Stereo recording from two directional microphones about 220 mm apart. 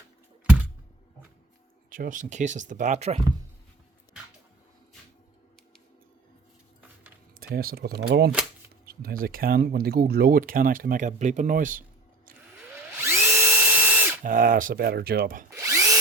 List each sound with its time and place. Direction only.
1.9 s speech: 40° right (ahead or behind)
7.3 s speech: 40° right (ahead or behind)
13.0 s drill: 10° right (ahead or behind)
14.3 s speech: 40° right (ahead or behind)
15.4 s drill: 15° right (ahead or behind)